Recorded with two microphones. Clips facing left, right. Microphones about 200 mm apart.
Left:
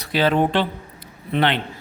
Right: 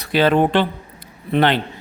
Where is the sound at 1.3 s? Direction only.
45° right (ahead or behind).